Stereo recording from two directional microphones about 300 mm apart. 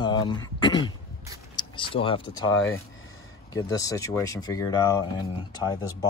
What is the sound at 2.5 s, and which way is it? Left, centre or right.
Speech, left.